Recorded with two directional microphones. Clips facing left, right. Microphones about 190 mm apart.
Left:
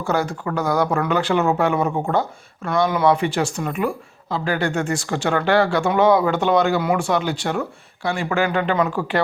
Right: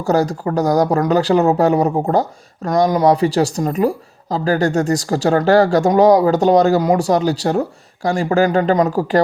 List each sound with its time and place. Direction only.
0.0 s speech: 40° right (ahead or behind)